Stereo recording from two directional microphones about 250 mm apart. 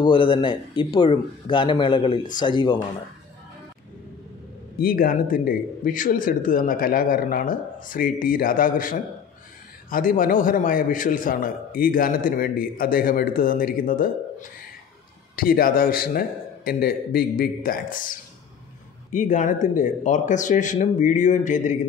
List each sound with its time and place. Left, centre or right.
0.0 s speech: centre
4.7 s a man's voice: left
19.1 s speech: left